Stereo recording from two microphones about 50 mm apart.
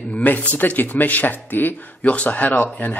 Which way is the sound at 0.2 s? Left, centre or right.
Left.